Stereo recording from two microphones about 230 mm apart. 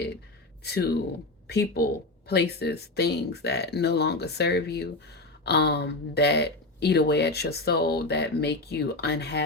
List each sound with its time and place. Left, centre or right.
0.6 s speech: left